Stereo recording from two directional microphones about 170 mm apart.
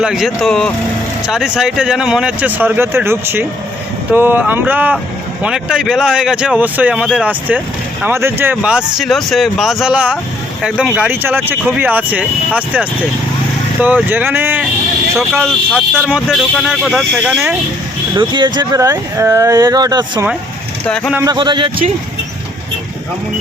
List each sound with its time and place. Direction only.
0.0 s speech: centre (ahead or behind)
15.1 s speech: centre (ahead or behind)
18.2 s speech: 25° right (ahead or behind)
20.8 s speech: 5° left (ahead or behind)
21.2 s speech: 25° right (ahead or behind)